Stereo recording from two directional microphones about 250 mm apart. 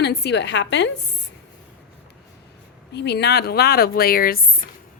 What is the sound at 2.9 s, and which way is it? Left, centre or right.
A woman's voice, left.